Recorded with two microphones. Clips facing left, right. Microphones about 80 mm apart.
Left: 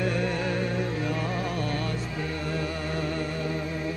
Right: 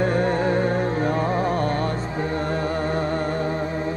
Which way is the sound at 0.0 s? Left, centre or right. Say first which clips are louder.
Right 7 dB; right.